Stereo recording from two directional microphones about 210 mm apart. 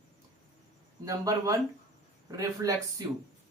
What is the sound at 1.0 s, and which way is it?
Speech, 15° right (ahead or behind).